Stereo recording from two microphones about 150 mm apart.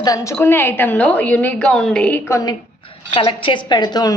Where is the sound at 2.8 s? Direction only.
35° left (ahead or behind).